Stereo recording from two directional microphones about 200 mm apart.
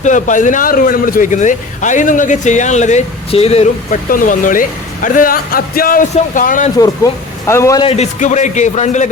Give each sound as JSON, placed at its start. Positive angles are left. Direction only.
{"t": 0.0, "sound": "speech", "side_deg": 40}
{"t": 4.1, "sound": "speech", "side_deg": 40}
{"t": 6.7, "sound": "speech", "side_deg": 15}
{"t": 7.9, "sound": "speech", "side_deg": 35}